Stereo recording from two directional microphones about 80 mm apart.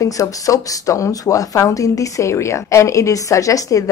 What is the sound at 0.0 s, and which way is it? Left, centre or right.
Speech, left.